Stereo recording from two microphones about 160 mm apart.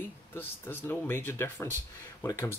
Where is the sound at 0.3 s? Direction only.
15° left (ahead or behind).